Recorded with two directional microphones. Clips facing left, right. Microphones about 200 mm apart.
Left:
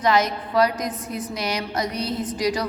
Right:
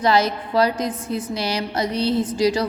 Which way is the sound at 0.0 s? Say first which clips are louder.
Right 2 dB; 30° right (ahead or behind).